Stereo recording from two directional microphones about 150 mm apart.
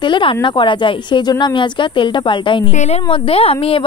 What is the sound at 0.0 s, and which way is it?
Speech, 35° left (ahead or behind).